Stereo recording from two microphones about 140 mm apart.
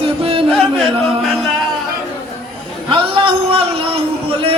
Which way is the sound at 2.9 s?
40° right (ahead or behind).